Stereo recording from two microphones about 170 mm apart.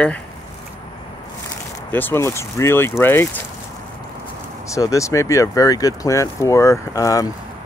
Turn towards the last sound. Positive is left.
turn(degrees=20)  # may be behind; listen again after turning